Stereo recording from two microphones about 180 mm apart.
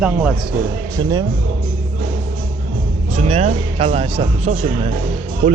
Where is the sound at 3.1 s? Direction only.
35° right (ahead or behind).